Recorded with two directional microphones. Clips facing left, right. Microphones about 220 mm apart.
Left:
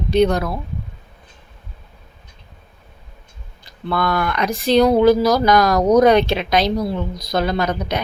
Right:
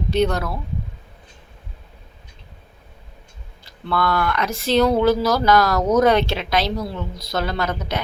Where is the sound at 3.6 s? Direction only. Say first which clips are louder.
Left 1 dB; 15° left (ahead or behind).